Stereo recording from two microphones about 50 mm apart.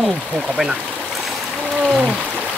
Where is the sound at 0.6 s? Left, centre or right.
Centre.